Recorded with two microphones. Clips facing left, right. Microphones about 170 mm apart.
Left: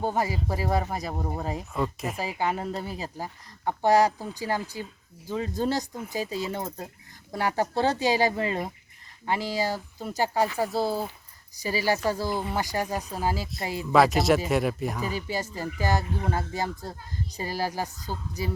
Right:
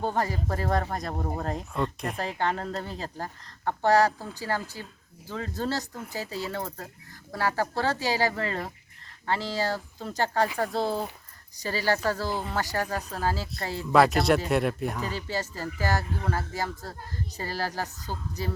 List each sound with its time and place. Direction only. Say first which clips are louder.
0.0 s speech: left 1 dB; 10° left (ahead or behind)
13.9 s speech: even; centre (ahead or behind)
15.0 s speech: left 1 dB; 15° left (ahead or behind)